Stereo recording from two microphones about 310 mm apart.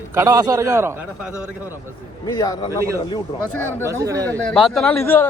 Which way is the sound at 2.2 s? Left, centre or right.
Centre.